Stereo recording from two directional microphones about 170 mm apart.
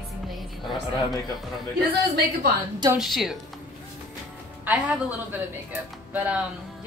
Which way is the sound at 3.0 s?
Centre (ahead or behind).